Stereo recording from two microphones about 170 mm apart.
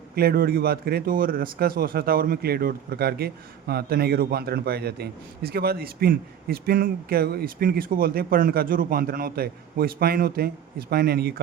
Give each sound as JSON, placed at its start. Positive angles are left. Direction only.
{"t": 0.2, "sound": "speech", "side_deg": -65}